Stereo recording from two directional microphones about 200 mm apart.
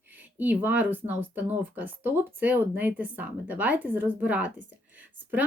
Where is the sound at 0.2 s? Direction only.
10° right (ahead or behind).